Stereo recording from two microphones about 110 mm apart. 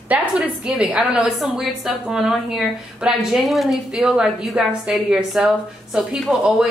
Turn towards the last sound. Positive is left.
turn(degrees=-5)  # may be behind; listen again after turning